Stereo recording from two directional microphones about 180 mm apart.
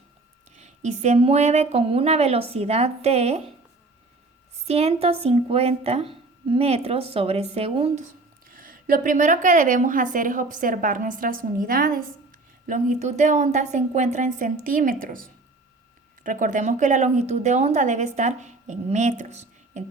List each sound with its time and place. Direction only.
0.5 s a woman's voice: 40° right (ahead or behind)
4.6 s a woman's voice: 35° right (ahead or behind)
8.4 s a woman's voice: 50° right (ahead or behind)